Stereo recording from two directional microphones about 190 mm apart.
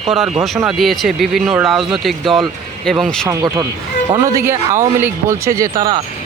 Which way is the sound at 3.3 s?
15° right (ahead or behind).